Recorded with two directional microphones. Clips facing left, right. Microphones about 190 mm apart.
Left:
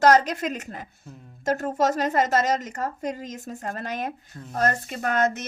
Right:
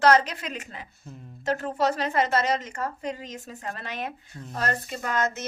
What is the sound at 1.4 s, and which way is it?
A woman's voice, 45° left (ahead or behind).